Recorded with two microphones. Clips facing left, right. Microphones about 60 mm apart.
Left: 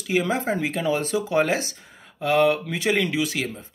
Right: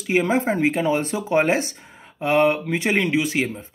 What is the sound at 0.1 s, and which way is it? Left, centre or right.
Speech, right.